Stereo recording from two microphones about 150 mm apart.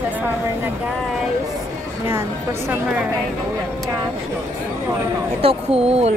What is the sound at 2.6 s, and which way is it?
Speech, 15° right (ahead or behind).